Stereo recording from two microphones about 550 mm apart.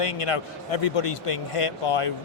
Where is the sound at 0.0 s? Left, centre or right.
Left.